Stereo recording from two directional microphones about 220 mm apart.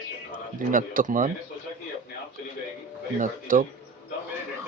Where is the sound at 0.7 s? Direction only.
40° right (ahead or behind).